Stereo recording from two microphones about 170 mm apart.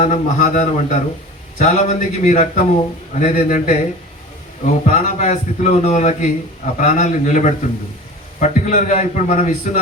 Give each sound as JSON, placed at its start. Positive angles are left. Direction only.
{"t": 0.0, "sound": "a man's voice", "side_deg": 50}